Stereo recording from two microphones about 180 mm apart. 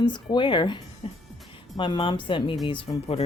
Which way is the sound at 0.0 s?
25° left (ahead or behind).